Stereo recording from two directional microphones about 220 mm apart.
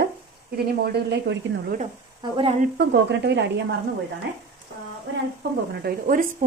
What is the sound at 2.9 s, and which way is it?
Speech, 50° right (ahead or behind).